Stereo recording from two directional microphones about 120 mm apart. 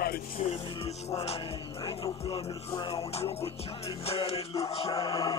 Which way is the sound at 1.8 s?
45° left (ahead or behind).